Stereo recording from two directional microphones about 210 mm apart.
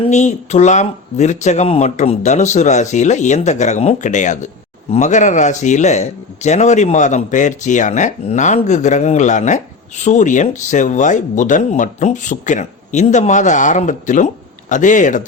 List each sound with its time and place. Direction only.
0.0 s speech: 35° left (ahead or behind)